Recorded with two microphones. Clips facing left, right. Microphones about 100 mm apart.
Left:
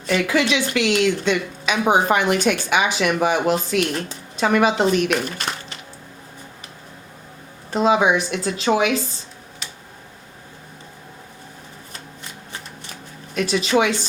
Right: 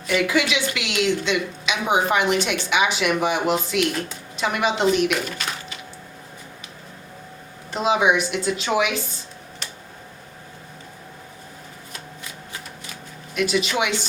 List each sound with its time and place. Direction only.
0.1 s a woman's voice: 35° left (ahead or behind)
7.7 s a woman's voice: 35° left (ahead or behind)
9.6 s tick-tock: centre (ahead or behind)
13.3 s a woman's voice: 35° left (ahead or behind)